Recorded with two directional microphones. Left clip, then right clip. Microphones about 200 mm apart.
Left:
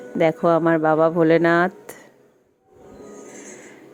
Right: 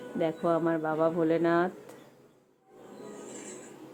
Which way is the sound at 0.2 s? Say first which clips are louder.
Left 11 dB; 25° left (ahead or behind).